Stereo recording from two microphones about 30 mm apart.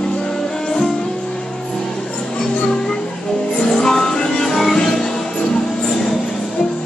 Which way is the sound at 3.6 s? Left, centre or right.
Centre.